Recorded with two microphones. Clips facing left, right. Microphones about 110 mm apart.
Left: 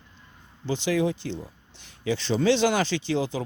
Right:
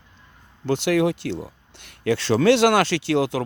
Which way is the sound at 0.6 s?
70° right (ahead or behind).